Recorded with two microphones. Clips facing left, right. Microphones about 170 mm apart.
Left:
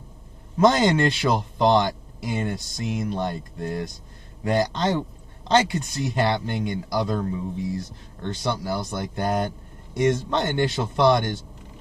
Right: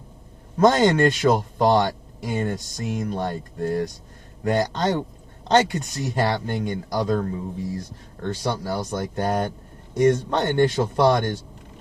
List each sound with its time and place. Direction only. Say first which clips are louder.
0.6 s speech: right 2 dB; 45° right (ahead or behind)